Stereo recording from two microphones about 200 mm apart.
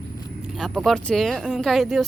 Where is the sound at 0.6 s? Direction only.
Centre (ahead or behind).